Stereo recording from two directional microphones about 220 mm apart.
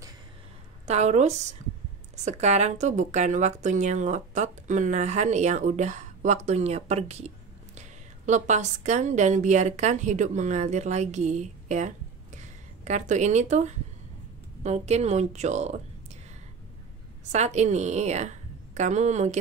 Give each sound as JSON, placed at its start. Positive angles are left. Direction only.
{"t": 0.8, "sound": "a woman's voice", "side_deg": -30}
{"t": 17.3, "sound": "a woman's voice", "side_deg": -30}